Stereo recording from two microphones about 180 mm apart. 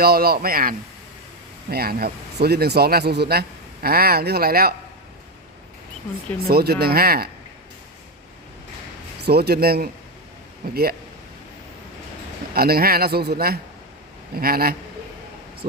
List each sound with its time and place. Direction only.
0.0 s a man's voice: 55° right (ahead or behind)
6.5 s a man's voice: 60° right (ahead or behind)
9.2 s a man's voice: 65° right (ahead or behind)
12.5 s a man's voice: 55° right (ahead or behind)